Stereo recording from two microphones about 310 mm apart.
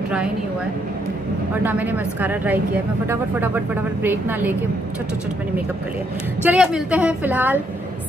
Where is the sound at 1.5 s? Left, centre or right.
Centre.